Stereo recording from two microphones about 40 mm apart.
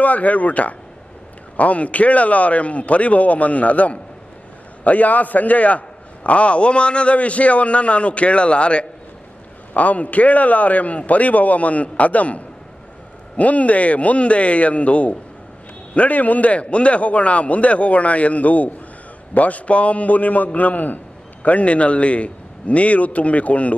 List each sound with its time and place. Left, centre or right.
0.0 s a man's voice: left